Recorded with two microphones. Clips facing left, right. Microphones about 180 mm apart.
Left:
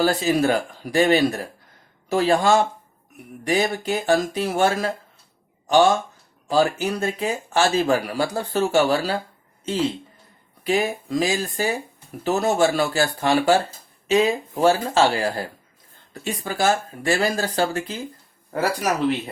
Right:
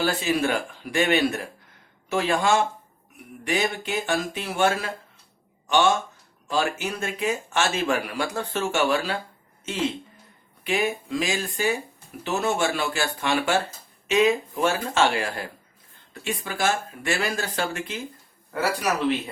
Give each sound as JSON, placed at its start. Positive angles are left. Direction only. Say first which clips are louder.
{"t": 0.0, "sound": "speech", "louder": "left 4 dB", "side_deg": 40}